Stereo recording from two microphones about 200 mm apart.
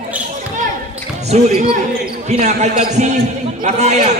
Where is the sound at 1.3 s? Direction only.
35° right (ahead or behind).